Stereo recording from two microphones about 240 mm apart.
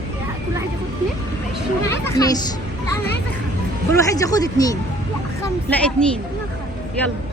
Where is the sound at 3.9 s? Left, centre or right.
Centre.